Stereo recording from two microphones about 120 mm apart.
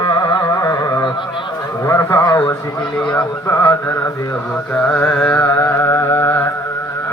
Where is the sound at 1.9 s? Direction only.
20° left (ahead or behind).